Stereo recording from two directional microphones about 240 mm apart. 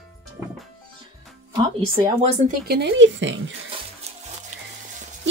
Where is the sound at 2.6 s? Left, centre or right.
Right.